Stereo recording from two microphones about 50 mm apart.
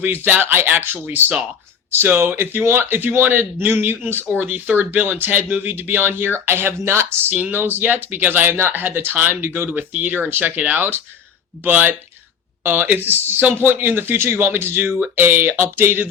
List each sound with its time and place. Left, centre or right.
0.0 s speech: right
7.5 s speech: right
10.5 s speech: right